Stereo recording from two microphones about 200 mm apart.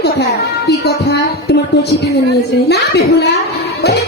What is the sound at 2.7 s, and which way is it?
Speech, 55° left (ahead or behind).